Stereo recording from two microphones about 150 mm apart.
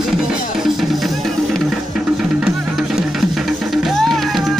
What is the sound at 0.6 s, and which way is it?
Music, centre (ahead or behind).